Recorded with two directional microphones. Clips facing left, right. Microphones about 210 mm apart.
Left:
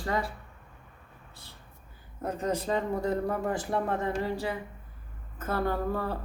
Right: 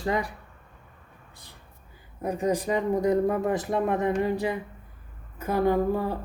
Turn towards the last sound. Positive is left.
turn(degrees=-15)  # may be behind; listen again after turning